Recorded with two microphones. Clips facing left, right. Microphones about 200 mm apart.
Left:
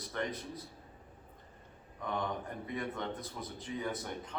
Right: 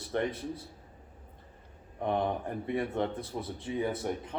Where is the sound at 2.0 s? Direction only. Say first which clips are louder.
Right 7 dB; 30° right (ahead or behind).